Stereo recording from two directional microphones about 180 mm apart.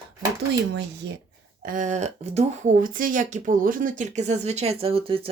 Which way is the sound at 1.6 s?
45° right (ahead or behind).